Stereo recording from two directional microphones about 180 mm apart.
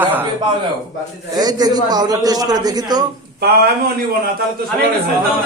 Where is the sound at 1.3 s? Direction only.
20° right (ahead or behind).